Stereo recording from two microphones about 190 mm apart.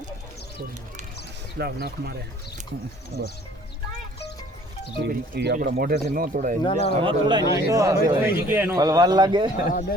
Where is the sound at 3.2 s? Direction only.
55° right (ahead or behind).